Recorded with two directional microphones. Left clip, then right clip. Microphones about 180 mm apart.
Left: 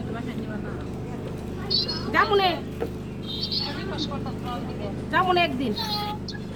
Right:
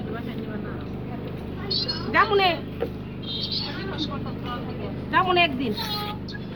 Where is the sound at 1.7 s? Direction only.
50° left (ahead or behind).